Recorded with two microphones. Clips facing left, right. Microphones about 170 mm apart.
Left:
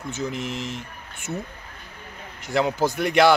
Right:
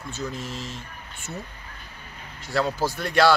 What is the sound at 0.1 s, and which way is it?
Speech, 20° left (ahead or behind).